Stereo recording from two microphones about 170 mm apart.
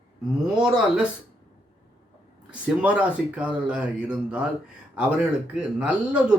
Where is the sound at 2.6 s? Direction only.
10° right (ahead or behind).